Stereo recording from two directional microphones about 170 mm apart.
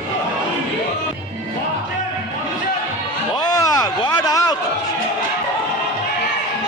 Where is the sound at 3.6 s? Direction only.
25° left (ahead or behind).